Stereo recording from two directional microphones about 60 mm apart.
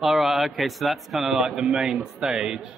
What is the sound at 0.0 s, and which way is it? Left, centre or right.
A man's voice, centre.